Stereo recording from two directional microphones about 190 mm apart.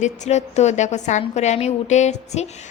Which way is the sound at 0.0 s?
35° left (ahead or behind).